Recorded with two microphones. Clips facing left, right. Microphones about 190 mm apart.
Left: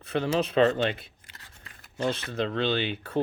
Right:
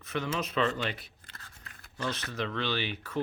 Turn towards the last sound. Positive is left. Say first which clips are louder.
# left 5 dB
turn(degrees=30)  # may be behind; listen again after turning